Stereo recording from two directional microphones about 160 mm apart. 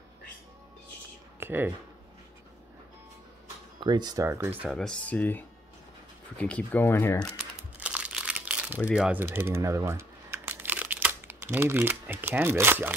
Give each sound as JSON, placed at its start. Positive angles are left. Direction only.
{"t": 1.4, "sound": "speech", "side_deg": -15}
{"t": 3.8, "sound": "speech", "side_deg": -25}
{"t": 4.6, "sound": "speech", "side_deg": 5}
{"t": 7.8, "sound": "crumpling", "side_deg": -5}
{"t": 8.9, "sound": "speech", "side_deg": -5}